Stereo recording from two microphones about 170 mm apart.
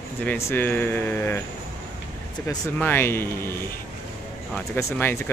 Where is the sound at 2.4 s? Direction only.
15° left (ahead or behind).